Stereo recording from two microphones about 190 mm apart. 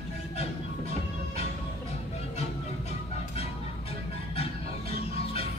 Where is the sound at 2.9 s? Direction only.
35° left (ahead or behind).